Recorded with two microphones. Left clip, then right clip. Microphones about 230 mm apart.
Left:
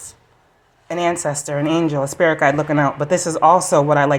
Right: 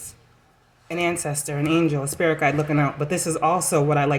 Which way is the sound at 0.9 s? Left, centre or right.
Centre.